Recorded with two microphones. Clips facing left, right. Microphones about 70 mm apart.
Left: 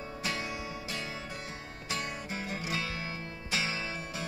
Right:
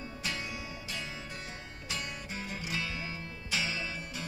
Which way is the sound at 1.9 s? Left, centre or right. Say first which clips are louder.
Left 3 dB; left.